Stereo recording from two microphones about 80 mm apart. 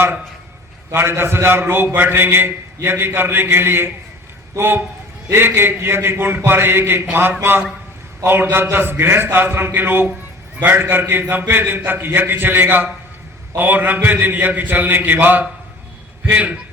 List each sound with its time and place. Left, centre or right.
0.9 s a man's voice: right